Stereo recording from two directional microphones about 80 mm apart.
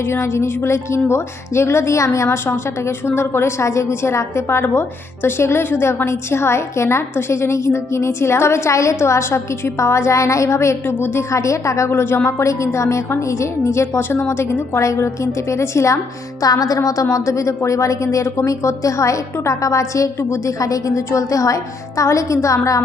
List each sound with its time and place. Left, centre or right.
0.1 s a woman's voice: left
16.4 s a woman's voice: left